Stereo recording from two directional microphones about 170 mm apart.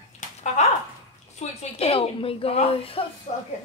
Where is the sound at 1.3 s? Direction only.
35° left (ahead or behind).